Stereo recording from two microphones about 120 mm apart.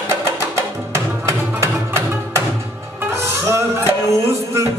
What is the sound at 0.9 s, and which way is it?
Music, 25° right (ahead or behind).